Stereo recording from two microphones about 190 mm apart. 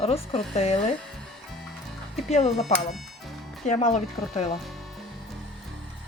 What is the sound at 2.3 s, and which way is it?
Speech, 35° left (ahead or behind).